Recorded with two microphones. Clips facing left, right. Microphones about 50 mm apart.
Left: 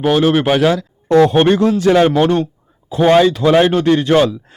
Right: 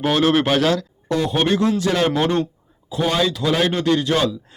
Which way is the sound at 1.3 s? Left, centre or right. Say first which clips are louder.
Left 6 dB; left.